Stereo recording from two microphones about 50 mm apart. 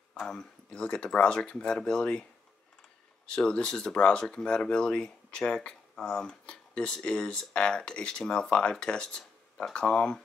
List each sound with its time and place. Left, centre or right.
0.2 s speech: centre
3.3 s speech: centre